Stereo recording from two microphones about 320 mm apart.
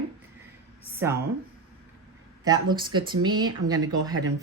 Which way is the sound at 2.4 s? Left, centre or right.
Centre.